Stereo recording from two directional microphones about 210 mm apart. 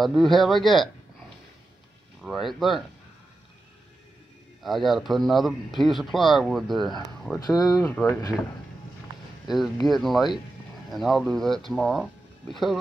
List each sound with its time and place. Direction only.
0.0 s speech: centre (ahead or behind)
2.2 s speech: centre (ahead or behind)
4.6 s speech: centre (ahead or behind)
7.3 s speech: 20° left (ahead or behind)
9.8 s speech: centre (ahead or behind)